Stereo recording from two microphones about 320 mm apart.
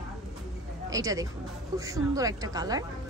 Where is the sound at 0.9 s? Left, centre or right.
Centre.